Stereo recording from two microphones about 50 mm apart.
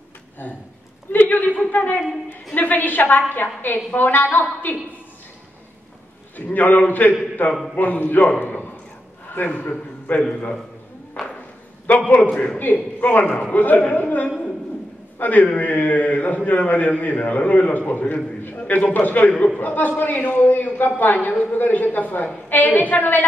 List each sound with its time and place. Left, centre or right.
1.1 s a man's voice: left
6.3 s a man's voice: left
11.2 s a sound: centre
12.5 s a man's voice: left
19.3 s a man's voice: left
19.6 s a man's voice: left